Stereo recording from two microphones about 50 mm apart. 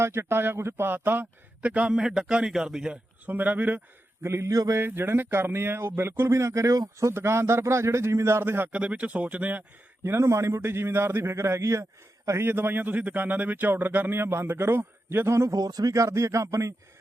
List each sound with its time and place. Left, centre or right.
0.0 s speech: right
1.6 s a man's voice: right
3.2 s speech: right
4.2 s a sound: right
4.8 s speech: right
7.2 s speech: right
8.7 s speech: right
10.0 s speech: right
12.4 s speech: right
16.0 s speech: right